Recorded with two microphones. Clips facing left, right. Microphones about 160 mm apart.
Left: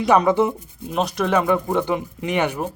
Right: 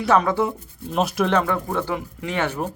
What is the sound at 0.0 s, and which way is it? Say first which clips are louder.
Speech: left 3 dB; 15° left (ahead or behind).